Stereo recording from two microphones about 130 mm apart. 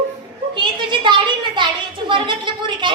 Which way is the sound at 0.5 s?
35° right (ahead or behind).